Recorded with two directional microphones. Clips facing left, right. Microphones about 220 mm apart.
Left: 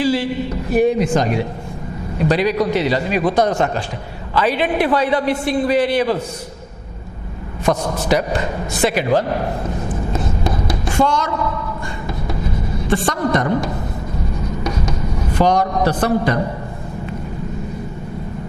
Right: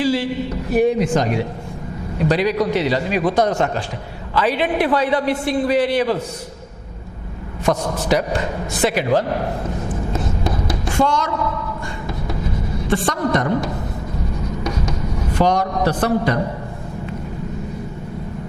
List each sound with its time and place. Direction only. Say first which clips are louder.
0.0 s a man's voice: left 1 dB; 10° left (ahead or behind)
7.6 s a man's voice: left 1 dB; 10° left (ahead or behind)
10.7 s a sound: left 1 dB; 10° left (ahead or behind)
12.9 s a man's voice: left 1 dB; 10° left (ahead or behind)
15.4 s a man's voice: left 2 dB; 10° left (ahead or behind)